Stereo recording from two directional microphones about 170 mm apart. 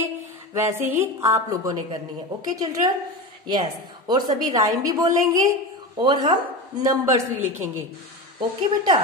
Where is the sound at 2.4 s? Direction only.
20° right (ahead or behind).